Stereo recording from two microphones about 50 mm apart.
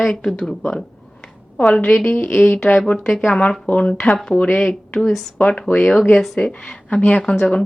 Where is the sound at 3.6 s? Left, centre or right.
Left.